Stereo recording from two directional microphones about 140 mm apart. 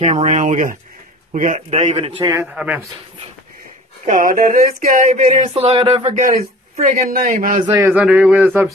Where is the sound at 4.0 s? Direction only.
75° right (ahead or behind).